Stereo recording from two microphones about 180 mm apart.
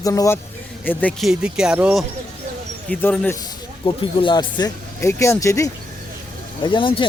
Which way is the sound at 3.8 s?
30° left (ahead or behind).